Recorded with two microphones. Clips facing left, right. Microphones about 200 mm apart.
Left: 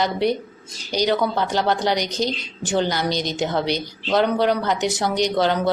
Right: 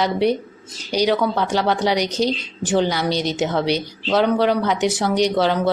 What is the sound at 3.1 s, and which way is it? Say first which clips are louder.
Speech: right 3 dB; 30° right (ahead or behind).